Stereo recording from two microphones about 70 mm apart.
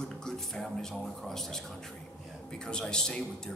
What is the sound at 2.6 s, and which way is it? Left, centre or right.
Speech, centre.